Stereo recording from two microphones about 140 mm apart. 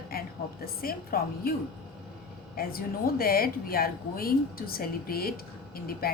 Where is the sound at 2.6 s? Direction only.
90° left.